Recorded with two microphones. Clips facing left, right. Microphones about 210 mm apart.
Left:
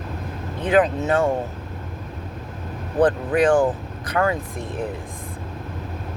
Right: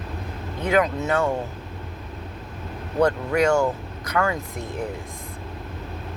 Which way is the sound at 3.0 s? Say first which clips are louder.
Left 2 dB; 30° left (ahead or behind).